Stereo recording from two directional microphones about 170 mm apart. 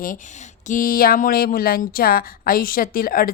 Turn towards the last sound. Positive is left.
turn(degrees=60)  # may be behind; listen again after turning